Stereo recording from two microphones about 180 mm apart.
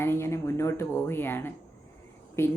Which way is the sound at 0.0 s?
15° left (ahead or behind).